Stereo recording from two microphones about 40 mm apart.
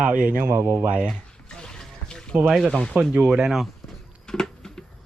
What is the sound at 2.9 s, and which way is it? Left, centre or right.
Speech, right.